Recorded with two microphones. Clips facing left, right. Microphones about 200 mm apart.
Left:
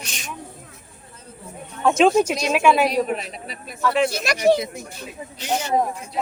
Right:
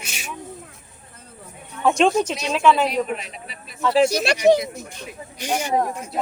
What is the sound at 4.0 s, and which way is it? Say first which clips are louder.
Speech: right 6 dB; 40° right (ahead or behind).